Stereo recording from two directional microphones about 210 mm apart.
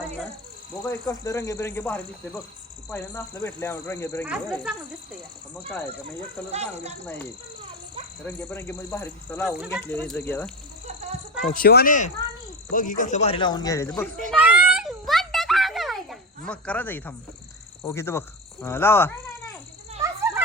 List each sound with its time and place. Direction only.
0.9 s speech: 15° left (ahead or behind)
4.3 s speech: 5° right (ahead or behind)
6.5 s speech: 30° right (ahead or behind)
8.2 s speech: 10° left (ahead or behind)
11.4 s speech: 45° left (ahead or behind); by 14.1 s 10° left (ahead or behind)
14.3 s a sound: 5° right (ahead or behind)
16.5 s speech: 5° left (ahead or behind)